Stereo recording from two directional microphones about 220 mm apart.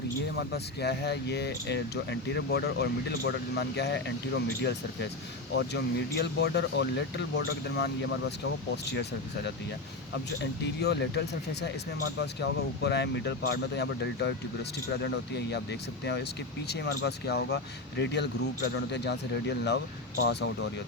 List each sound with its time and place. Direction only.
0.3 s speech: 50° left (ahead or behind)
10.8 s speech: 50° left (ahead or behind)